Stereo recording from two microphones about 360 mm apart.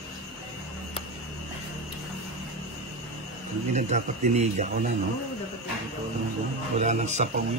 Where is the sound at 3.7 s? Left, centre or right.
Centre.